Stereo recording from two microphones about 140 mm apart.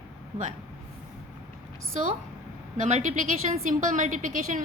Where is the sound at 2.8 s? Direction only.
60° right (ahead or behind).